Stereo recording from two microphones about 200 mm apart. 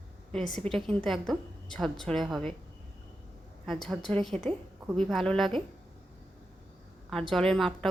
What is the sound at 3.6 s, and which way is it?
A woman's voice, centre (ahead or behind).